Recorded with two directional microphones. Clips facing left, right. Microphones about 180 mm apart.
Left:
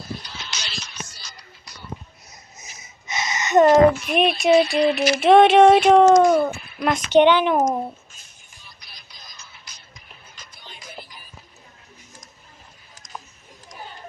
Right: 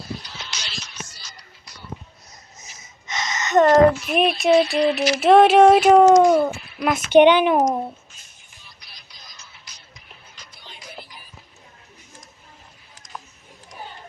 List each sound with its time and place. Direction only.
2.3 s a sound: 10° left (ahead or behind)
4.0 s speech: centre (ahead or behind)
7.2 s speech: 15° right (ahead or behind)
7.7 s speech: centre (ahead or behind)
8.8 s music: 50° left (ahead or behind)